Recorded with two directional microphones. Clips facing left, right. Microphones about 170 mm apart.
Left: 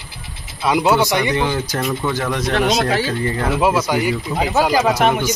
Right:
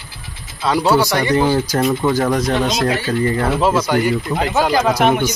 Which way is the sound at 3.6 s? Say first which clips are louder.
Even; 10° left (ahead or behind).